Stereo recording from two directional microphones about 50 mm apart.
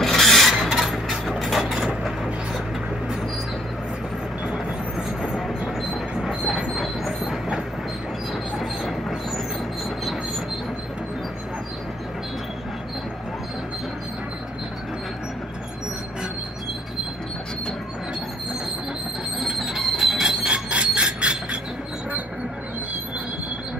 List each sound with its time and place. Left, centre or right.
0.0 s filing: centre
0.7 s a sound: centre
1.1 s mechanisms: centre
5.2 s train: centre
19.4 s train: centre
20.4 s a sound: right